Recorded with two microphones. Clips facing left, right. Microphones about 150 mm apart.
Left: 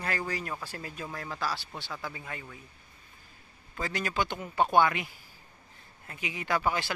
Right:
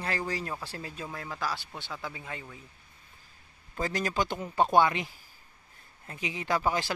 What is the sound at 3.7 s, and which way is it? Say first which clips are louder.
Speech: right 2 dB; 40° right (ahead or behind).